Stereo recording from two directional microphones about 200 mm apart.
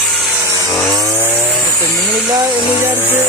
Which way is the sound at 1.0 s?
10° left (ahead or behind).